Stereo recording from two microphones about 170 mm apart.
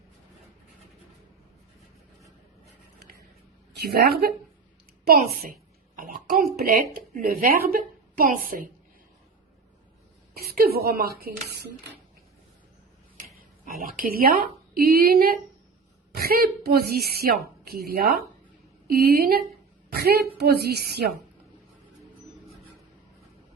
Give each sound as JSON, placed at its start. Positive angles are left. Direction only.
{"t": 3.8, "sound": "a woman's voice", "side_deg": -65}
{"t": 6.0, "sound": "a woman's voice", "side_deg": -60}
{"t": 10.3, "sound": "a woman's voice", "side_deg": -65}
{"t": 13.3, "sound": "a woman's voice", "side_deg": -55}